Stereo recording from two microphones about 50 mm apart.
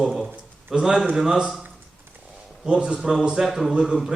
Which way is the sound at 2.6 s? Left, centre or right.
Centre.